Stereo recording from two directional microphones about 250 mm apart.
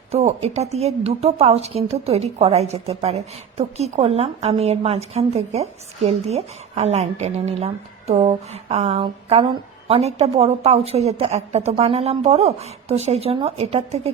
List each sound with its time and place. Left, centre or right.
0.1 s a woman's voice: right